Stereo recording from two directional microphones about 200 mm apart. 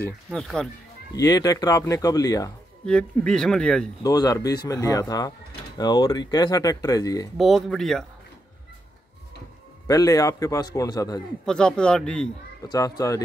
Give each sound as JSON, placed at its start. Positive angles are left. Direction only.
{"t": 0.0, "sound": "speech", "side_deg": 5}
{"t": 1.1, "sound": "speech", "side_deg": 20}
{"t": 2.8, "sound": "speech", "side_deg": 5}
{"t": 4.0, "sound": "speech", "side_deg": 20}
{"t": 7.3, "sound": "speech", "side_deg": 0}
{"t": 9.8, "sound": "speech", "side_deg": 15}
{"t": 11.4, "sound": "speech", "side_deg": 5}
{"t": 12.6, "sound": "speech", "side_deg": 20}